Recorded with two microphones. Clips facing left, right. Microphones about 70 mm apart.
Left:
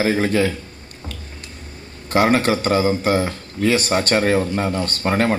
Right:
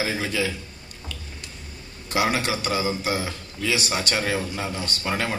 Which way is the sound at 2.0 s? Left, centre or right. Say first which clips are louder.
Left 7 dB; left.